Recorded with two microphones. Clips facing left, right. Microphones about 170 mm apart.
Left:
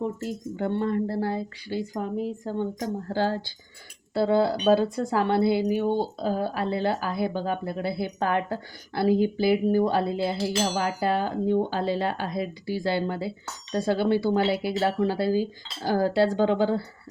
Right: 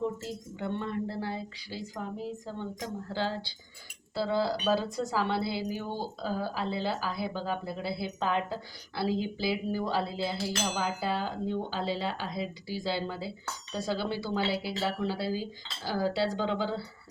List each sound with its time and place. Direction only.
0.2 s speech: 50° left (ahead or behind)
4.1 s speech: 55° left (ahead or behind)